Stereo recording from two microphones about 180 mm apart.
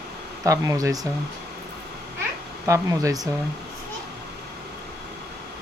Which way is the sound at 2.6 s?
15° right (ahead or behind).